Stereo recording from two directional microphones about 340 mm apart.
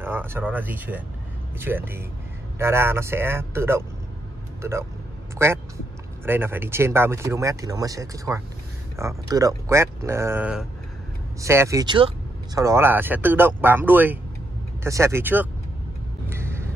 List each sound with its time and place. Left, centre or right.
0.0 s speech: centre
16.3 s music: centre